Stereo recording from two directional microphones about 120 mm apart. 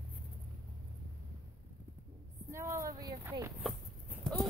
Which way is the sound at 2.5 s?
25° right (ahead or behind).